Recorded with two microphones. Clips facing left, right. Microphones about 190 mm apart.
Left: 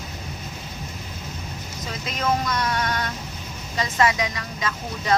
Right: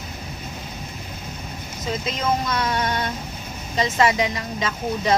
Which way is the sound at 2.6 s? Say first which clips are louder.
Right 2 dB; 25° right (ahead or behind).